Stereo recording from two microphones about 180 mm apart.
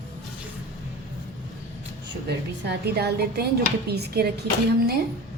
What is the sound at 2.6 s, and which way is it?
Speech, 65° right (ahead or behind).